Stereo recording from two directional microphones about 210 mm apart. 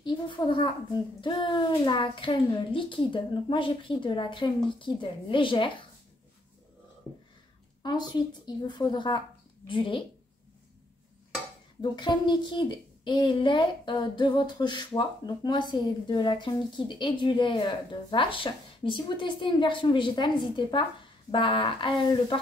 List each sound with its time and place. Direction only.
0.0 s a child's voice: 25° left (ahead or behind)
7.8 s speech: 20° left (ahead or behind)
11.8 s speech: 20° left (ahead or behind)